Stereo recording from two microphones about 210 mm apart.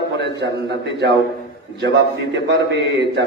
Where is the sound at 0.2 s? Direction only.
55° right (ahead or behind).